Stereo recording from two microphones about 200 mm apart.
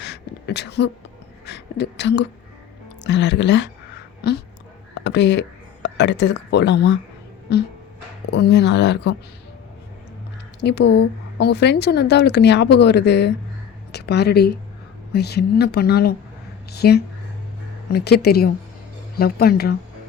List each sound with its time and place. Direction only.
0.0 s a sound: 60° left (ahead or behind)
1.5 s a woman's voice: 60° left (ahead or behind)
5.0 s a woman's voice: 60° left (ahead or behind)
10.6 s a woman's voice: 55° left (ahead or behind)